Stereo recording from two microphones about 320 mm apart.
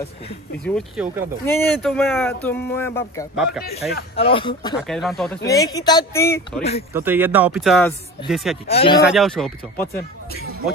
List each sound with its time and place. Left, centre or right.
0.7 s speech: centre
4.2 s speech: centre
4.7 s speech: centre
6.9 s speech: centre
8.6 s speech: centre
9.0 s speech: centre